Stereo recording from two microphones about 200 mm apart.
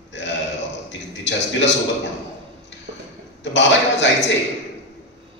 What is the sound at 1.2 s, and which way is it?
Speech, 65° left (ahead or behind).